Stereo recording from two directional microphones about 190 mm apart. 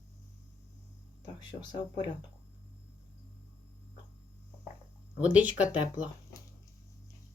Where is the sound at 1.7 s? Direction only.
25° left (ahead or behind).